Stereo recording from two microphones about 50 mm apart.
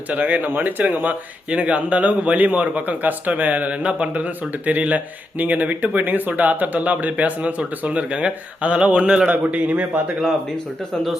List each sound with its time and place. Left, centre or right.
0.1 s speech: right
1.5 s speech: right
9.3 s a man's voice: right